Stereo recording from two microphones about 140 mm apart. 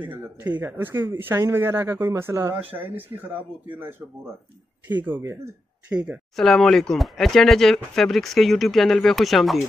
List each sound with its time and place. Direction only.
0.0 s speech: 10° right (ahead or behind)
4.8 s speech: 15° right (ahead or behind)
5.9 s speech: centre (ahead or behind)